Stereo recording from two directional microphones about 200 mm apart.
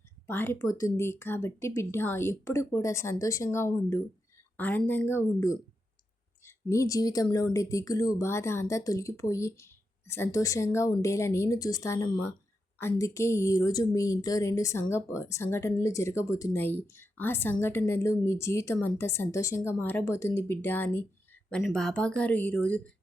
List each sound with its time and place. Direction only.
0.3 s a woman's voice: 10° left (ahead or behind)